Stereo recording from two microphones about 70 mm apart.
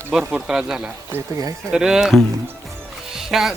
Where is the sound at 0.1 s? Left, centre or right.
Centre.